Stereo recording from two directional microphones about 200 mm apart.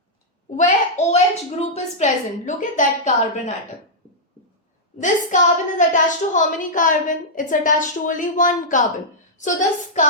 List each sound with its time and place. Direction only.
0.5 s a woman's voice: 35° left (ahead or behind)
4.9 s a woman's voice: 40° left (ahead or behind)